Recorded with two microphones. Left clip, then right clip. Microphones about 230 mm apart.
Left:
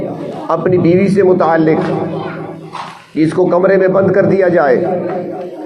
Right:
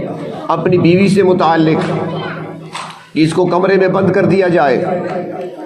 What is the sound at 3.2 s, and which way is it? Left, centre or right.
A man's voice, right.